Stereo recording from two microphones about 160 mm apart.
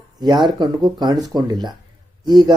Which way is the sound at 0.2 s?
25° right (ahead or behind).